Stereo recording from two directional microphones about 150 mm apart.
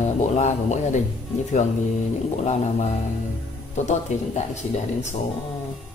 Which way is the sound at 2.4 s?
45° left (ahead or behind).